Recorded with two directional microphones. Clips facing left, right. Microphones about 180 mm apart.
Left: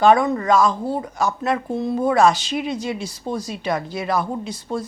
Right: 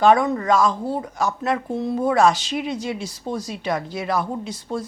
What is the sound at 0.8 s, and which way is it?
Speech, 30° left (ahead or behind).